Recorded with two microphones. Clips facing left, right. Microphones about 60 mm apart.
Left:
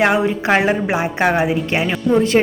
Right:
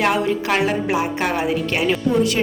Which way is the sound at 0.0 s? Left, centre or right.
Left.